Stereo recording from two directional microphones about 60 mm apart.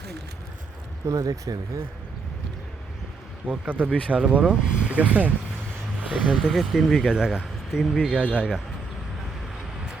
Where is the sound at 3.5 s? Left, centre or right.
Right.